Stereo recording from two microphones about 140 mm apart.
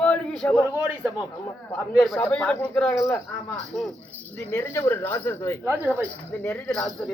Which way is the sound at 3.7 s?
Centre (ahead or behind).